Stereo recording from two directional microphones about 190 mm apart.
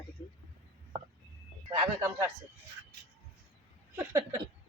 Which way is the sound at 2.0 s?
15° right (ahead or behind).